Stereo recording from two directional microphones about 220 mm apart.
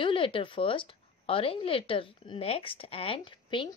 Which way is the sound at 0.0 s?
25° left (ahead or behind).